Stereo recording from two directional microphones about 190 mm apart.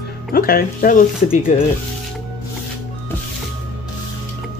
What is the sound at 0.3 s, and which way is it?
Speech, 50° left (ahead or behind).